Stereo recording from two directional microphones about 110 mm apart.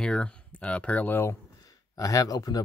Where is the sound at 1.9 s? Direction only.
30° left (ahead or behind).